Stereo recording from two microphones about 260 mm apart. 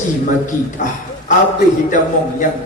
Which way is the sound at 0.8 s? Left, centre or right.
Left.